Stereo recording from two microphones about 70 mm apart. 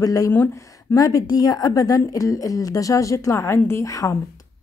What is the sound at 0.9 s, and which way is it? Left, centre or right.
Speech, left.